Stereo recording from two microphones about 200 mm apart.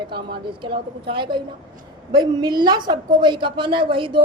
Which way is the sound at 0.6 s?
25° right (ahead or behind).